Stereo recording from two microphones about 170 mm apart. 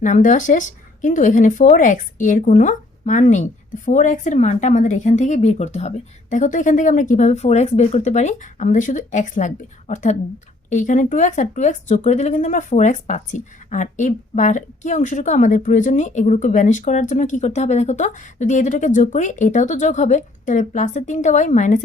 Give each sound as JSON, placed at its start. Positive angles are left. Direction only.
{"t": 0.0, "sound": "speech", "side_deg": 50}